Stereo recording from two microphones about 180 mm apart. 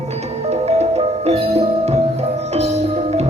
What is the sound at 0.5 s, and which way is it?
Music, 35° right (ahead or behind).